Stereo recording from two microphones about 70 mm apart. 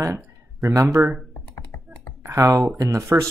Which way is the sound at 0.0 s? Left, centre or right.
Right.